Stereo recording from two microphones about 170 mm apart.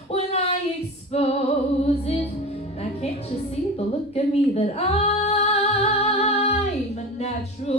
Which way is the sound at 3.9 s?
35° left (ahead or behind).